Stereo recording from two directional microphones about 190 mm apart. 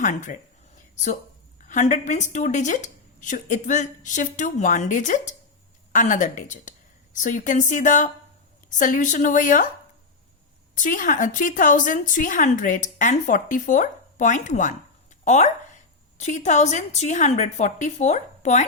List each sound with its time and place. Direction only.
0.0 s a woman's voice: 40° left (ahead or behind)
1.6 s a woman's voice: 40° left (ahead or behind)
10.8 s a woman's voice: 45° left (ahead or behind)